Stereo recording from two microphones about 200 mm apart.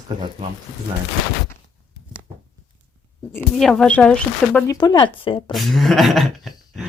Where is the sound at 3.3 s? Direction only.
5° left (ahead or behind).